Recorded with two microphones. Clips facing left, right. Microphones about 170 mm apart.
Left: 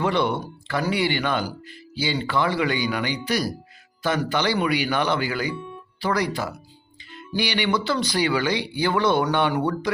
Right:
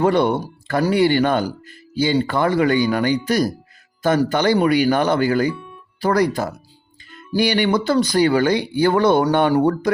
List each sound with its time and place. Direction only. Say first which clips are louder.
0.0 s speech: right 6 dB; 45° right (ahead or behind)